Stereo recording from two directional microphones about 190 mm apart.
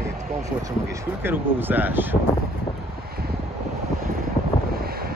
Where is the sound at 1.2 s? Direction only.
10° right (ahead or behind).